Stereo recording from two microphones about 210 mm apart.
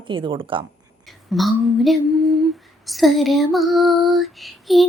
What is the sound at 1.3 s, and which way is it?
Female singing, centre (ahead or behind).